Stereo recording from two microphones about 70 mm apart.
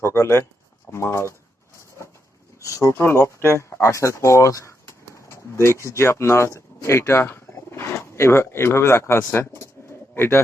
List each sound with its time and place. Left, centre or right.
0.0 s speech: left
2.6 s speech: left